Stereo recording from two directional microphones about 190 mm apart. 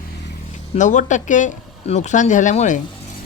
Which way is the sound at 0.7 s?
40° left (ahead or behind).